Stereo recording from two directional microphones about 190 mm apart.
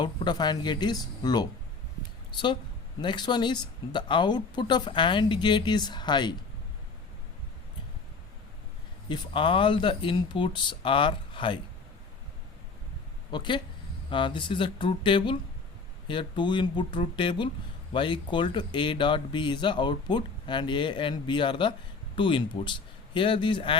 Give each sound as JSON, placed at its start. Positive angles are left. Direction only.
{"t": 0.0, "sound": "speech", "side_deg": 25}
{"t": 9.0, "sound": "speech", "side_deg": 25}
{"t": 13.3, "sound": "speech", "side_deg": 25}